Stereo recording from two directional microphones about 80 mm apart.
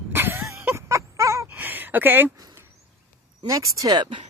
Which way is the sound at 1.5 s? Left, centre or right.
Right.